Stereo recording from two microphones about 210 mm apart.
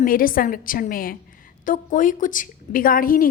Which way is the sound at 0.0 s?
40° left (ahead or behind).